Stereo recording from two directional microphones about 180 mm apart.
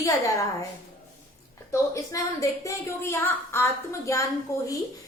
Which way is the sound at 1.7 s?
15° left (ahead or behind).